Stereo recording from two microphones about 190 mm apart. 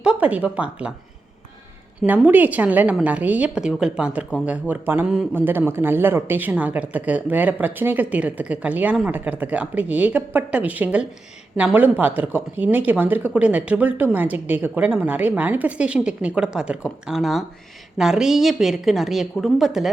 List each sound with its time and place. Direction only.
0.0 s a man's voice: 5° right (ahead or behind)
2.0 s a man's voice: 10° right (ahead or behind)